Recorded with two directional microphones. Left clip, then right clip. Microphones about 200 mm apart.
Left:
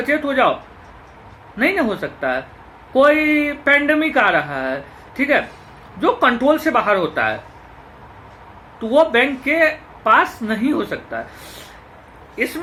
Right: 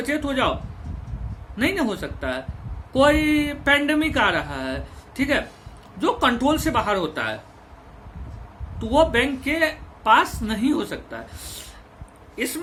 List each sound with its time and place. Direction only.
0.0 s speech: 15° right (ahead or behind)
1.5 s speech: 15° right (ahead or behind)
8.9 s speech: 15° right (ahead or behind)